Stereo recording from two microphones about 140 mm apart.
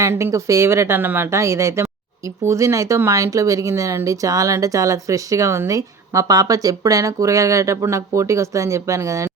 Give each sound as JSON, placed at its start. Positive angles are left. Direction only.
{"t": 0.0, "sound": "speech", "side_deg": -20}